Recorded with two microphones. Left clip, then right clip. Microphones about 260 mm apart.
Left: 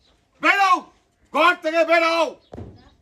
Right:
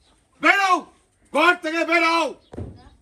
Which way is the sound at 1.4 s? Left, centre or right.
Centre.